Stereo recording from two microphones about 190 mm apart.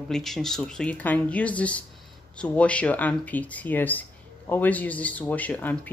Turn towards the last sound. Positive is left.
turn(degrees=10)  # may be behind; listen again after turning